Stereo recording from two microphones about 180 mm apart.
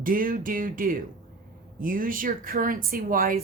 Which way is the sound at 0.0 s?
50° right (ahead or behind).